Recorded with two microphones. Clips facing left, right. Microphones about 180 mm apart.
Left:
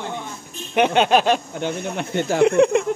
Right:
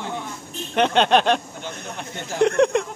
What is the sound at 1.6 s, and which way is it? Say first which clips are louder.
Speech: left 8 dB; 65° left (ahead or behind).